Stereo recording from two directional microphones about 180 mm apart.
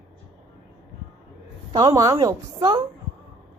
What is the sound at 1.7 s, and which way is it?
A woman's voice, 20° right (ahead or behind).